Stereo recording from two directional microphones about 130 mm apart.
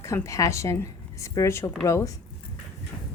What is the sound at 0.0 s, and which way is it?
Speech, 25° left (ahead or behind).